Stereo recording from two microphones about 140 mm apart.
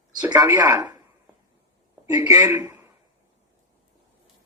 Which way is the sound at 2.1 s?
25° right (ahead or behind).